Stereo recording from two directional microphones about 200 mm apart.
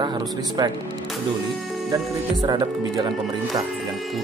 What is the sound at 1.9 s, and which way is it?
Speech, 20° right (ahead or behind).